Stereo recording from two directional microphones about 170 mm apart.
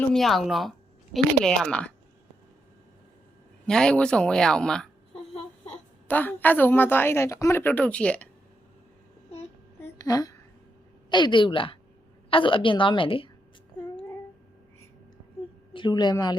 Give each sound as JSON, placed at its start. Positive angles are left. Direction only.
{"t": 0.1, "sound": "speech", "side_deg": 0}
{"t": 3.7, "sound": "a woman's voice", "side_deg": 5}
{"t": 9.8, "sound": "a sound", "side_deg": 20}
{"t": 11.1, "sound": "a woman's voice", "side_deg": 25}
{"t": 15.7, "sound": "a woman's voice", "side_deg": 25}